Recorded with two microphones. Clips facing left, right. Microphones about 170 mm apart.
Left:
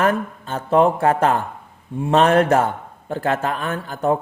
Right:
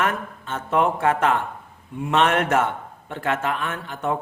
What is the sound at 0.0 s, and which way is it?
A man's voice, 35° left (ahead or behind).